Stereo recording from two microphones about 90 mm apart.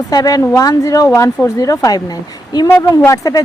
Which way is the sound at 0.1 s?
45° left (ahead or behind).